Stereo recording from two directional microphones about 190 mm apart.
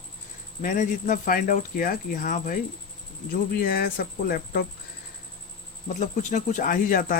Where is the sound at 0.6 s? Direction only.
45° left (ahead or behind).